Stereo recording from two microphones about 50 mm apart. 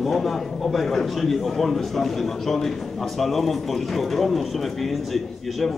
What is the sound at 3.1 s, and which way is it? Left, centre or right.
A man's voice, centre.